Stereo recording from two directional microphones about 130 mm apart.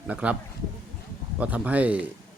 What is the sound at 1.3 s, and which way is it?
Speech, 10° right (ahead or behind).